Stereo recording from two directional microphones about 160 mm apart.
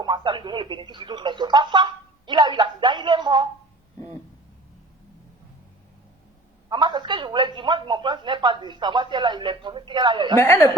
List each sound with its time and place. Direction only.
0.0 s a man's voice: 30° right (ahead or behind)
6.7 s a man's voice: 25° right (ahead or behind)
10.3 s a woman's voice: 15° left (ahead or behind)